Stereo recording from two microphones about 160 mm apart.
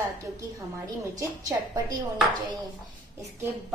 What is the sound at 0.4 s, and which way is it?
Speech, 20° right (ahead or behind).